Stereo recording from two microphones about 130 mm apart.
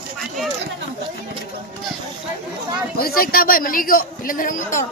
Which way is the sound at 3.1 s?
90° left.